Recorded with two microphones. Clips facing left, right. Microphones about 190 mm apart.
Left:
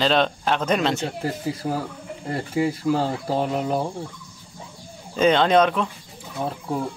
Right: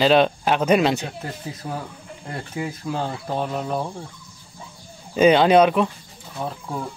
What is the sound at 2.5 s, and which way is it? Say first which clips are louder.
Speech: left 7 dB; 5° left (ahead or behind).